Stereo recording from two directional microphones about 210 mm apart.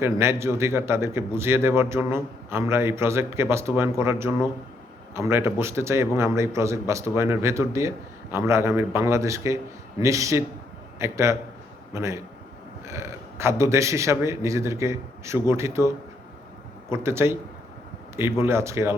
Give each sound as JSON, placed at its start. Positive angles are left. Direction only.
{"t": 0.0, "sound": "a man's voice", "side_deg": -10}
{"t": 16.9, "sound": "a man's voice", "side_deg": -10}